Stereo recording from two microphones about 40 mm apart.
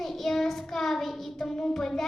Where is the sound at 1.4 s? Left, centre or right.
Centre.